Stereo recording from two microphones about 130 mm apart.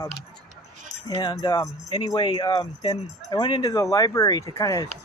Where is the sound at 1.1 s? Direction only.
30° left (ahead or behind).